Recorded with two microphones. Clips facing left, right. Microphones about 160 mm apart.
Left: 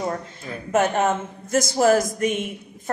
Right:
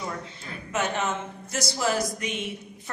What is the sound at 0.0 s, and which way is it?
A man's voice, 45° left (ahead or behind).